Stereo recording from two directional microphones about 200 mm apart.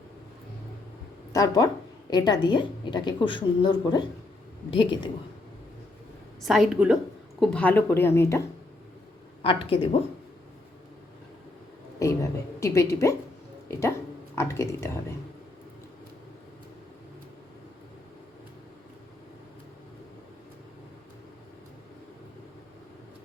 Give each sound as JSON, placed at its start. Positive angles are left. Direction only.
{"t": 1.3, "sound": "a woman's voice", "side_deg": 15}
{"t": 6.4, "sound": "a woman's voice", "side_deg": 0}
{"t": 9.4, "sound": "a woman's voice", "side_deg": 25}
{"t": 11.9, "sound": "a woman's voice", "side_deg": 15}